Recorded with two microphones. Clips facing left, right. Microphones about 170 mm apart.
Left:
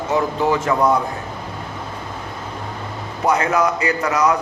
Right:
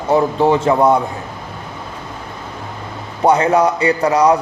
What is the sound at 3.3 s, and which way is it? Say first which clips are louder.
A man's voice: right 5 dB; 30° right (ahead or behind).